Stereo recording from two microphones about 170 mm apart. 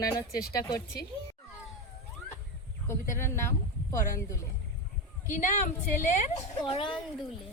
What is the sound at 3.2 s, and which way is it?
Speech, 15° left (ahead or behind).